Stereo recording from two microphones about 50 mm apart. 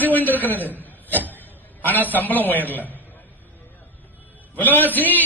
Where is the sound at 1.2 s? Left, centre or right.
Left.